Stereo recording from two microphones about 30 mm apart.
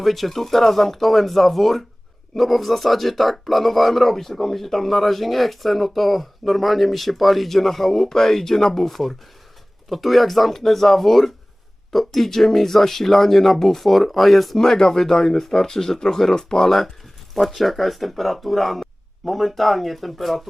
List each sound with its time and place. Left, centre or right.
0.0 s speech: centre
14.6 s speech: left
17.3 s speech: centre